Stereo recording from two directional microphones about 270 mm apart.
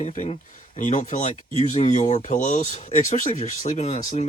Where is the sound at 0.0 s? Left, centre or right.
Left.